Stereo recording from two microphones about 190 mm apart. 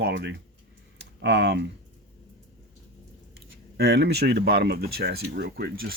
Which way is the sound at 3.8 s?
60° right (ahead or behind).